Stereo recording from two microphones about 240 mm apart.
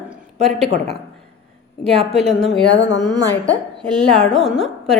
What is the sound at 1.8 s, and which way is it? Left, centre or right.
Speech, right.